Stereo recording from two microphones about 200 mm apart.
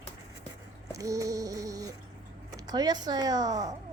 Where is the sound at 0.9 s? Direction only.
15° right (ahead or behind).